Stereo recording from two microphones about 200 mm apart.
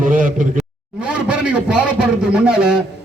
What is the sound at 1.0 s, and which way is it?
A man's voice, 5° right (ahead or behind).